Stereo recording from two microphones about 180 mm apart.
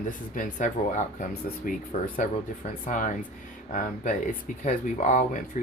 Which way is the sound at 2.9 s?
45° left (ahead or behind).